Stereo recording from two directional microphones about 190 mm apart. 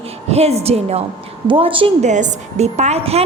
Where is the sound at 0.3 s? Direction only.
35° right (ahead or behind).